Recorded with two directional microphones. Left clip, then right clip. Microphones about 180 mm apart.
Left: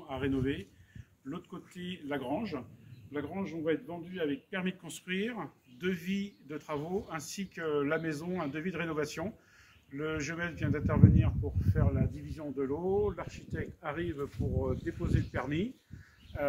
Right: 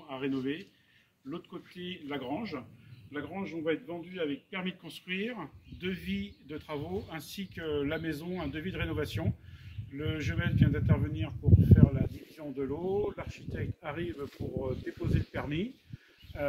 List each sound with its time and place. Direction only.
0.0 s a man's voice: 20° left (ahead or behind); by 12.7 s 30° right (ahead or behind)
12.7 s speech: 20° right (ahead or behind)
16.3 s a sound: 25° right (ahead or behind)